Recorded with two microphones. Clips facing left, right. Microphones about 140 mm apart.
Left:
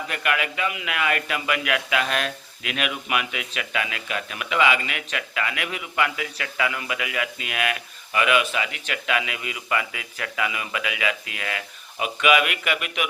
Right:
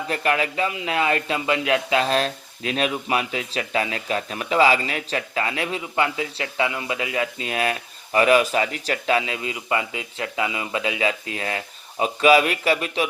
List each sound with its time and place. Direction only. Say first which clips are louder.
0.1 s speech: right 4 dB; 30° right (ahead or behind)